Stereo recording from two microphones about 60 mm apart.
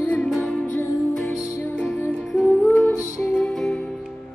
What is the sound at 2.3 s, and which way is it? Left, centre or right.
Music, left.